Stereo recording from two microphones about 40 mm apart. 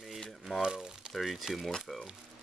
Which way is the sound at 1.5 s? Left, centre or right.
Centre.